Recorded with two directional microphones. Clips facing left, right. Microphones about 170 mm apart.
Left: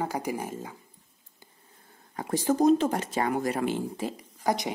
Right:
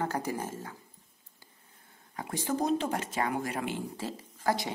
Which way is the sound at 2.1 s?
40° left (ahead or behind).